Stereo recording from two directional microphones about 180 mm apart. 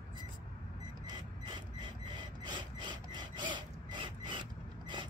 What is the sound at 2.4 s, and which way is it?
Filing, 25° right (ahead or behind).